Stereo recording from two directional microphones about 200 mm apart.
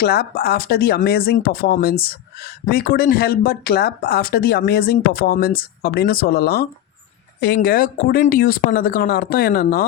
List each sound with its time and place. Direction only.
0.0 s speech: 50° left (ahead or behind)